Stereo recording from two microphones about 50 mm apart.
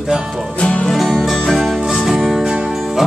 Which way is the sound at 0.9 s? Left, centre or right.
Centre.